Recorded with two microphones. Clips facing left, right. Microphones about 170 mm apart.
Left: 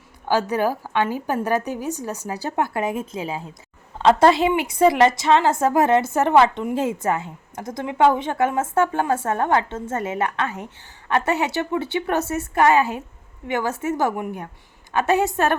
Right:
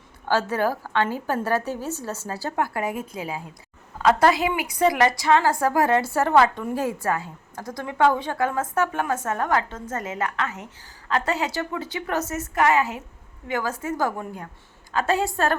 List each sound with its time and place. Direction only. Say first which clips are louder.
0.3 s a woman's voice: left 2 dB; 15° left (ahead or behind)